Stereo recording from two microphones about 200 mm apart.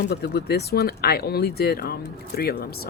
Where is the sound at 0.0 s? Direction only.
55° left (ahead or behind).